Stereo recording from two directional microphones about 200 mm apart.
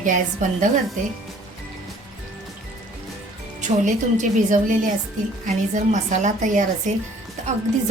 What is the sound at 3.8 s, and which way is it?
A woman's voice, 40° right (ahead or behind).